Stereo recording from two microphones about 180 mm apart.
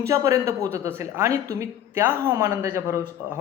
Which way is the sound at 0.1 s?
20° right (ahead or behind).